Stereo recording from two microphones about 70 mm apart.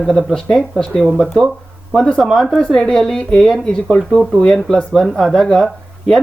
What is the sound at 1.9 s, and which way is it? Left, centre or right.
Speech, centre.